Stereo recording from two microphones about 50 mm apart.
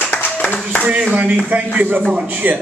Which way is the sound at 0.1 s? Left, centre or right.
Left.